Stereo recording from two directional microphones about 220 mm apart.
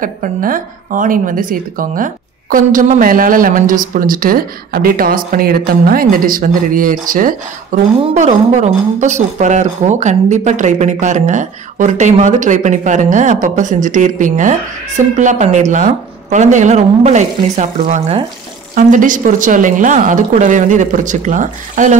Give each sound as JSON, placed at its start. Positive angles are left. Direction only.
{"t": 0.0, "sound": "speech", "side_deg": -40}